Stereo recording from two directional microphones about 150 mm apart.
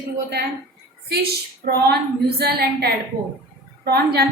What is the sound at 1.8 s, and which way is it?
A woman's voice, 90° right.